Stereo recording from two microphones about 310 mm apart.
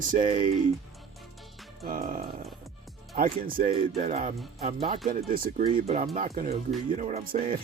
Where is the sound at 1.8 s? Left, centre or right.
Right.